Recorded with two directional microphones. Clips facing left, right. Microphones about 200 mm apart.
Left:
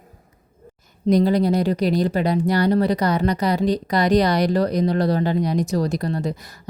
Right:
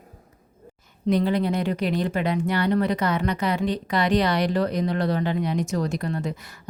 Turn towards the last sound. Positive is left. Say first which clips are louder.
# left 4 dB
turn(degrees=35)  # may be behind; listen again after turning